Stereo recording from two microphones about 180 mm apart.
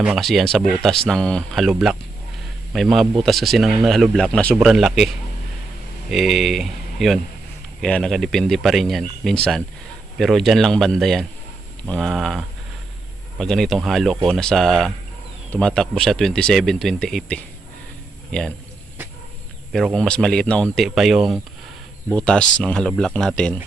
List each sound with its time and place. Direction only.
0.0 s speech: centre (ahead or behind)
13.4 s a man's voice: centre (ahead or behind)
19.7 s speech: centre (ahead or behind)